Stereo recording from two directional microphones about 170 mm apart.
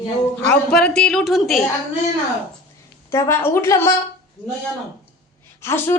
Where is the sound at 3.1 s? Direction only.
15° left (ahead or behind).